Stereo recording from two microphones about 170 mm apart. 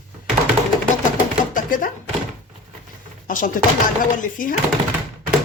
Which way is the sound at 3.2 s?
50° left (ahead or behind).